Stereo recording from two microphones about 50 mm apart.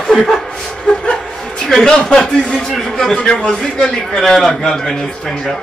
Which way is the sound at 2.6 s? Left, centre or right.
Centre.